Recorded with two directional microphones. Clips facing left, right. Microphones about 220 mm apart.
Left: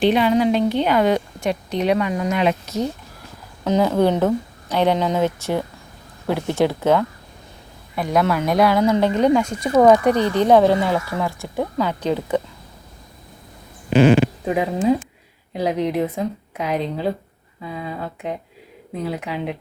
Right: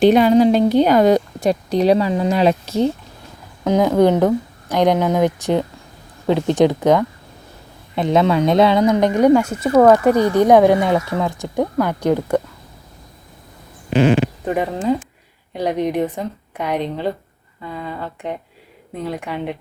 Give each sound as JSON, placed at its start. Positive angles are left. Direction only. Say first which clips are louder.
{"t": 0.0, "sound": "speech", "louder": "right 5 dB", "side_deg": -45}
{"t": 3.6, "sound": "speech", "louder": "right 3 dB", "side_deg": -10}
{"t": 13.9, "sound": "speech", "louder": "left 1 dB", "side_deg": 5}